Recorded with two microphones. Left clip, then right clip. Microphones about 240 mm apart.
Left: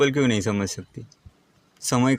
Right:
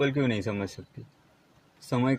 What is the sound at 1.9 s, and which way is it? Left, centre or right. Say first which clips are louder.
Speech: left 6 dB; left.